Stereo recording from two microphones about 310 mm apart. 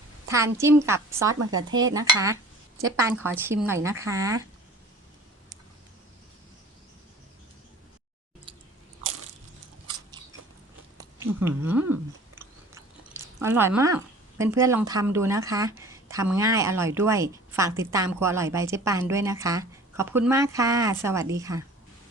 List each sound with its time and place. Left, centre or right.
0.3 s speech: centre
1.4 s speech: right
1.8 s speech: centre
11.2 s speech: centre